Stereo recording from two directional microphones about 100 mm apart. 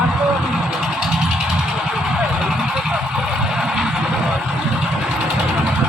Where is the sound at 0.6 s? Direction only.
5° right (ahead or behind).